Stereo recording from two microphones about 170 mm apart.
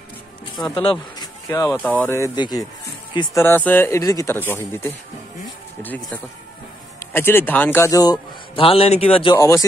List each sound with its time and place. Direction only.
0.6 s speech: 25° left (ahead or behind)
3.3 s speech: 10° left (ahead or behind)
7.1 s a man's voice: 10° left (ahead or behind); by 9.3 s 35° left (ahead or behind)
9.3 s speech: 15° left (ahead or behind)